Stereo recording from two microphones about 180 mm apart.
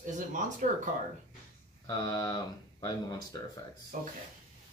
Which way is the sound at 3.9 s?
45° right (ahead or behind).